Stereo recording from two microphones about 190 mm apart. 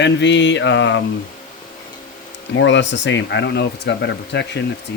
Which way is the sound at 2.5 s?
70° left (ahead or behind).